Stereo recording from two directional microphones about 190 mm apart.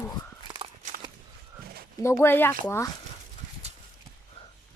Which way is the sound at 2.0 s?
15° left (ahead or behind).